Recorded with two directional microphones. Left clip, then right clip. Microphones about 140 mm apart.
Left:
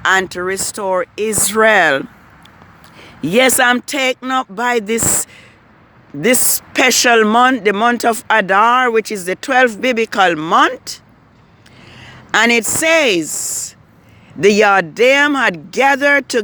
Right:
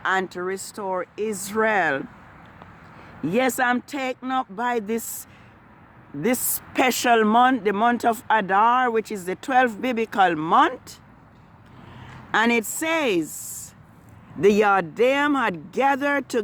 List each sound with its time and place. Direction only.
0.0 s speech: 35° left (ahead or behind)
6.5 s speech: centre (ahead or behind)